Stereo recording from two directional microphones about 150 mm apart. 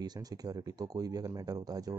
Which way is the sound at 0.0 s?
25° right (ahead or behind).